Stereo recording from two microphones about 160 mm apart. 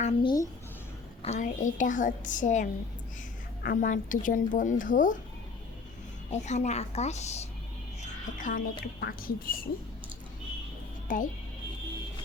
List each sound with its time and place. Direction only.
0.0 s a child's voice: 35° left (ahead or behind)
1.2 s a woman's voice: 45° left (ahead or behind)
6.3 s a woman's voice: 45° left (ahead or behind)
8.0 s speech: 55° left (ahead or behind)
8.8 s speech: 70° left (ahead or behind)
11.1 s speech: 55° left (ahead or behind)